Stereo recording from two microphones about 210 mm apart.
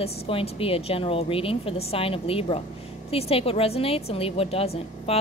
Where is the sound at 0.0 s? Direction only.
25° left (ahead or behind).